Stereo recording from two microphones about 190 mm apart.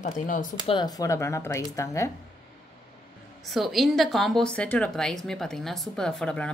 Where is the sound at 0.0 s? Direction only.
45° left (ahead or behind).